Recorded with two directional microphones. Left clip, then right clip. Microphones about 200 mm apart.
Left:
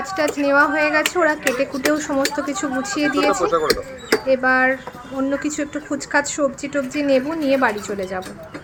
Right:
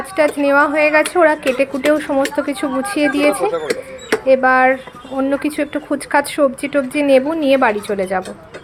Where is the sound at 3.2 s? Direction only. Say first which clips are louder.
Right 2 dB; 35° left (ahead or behind).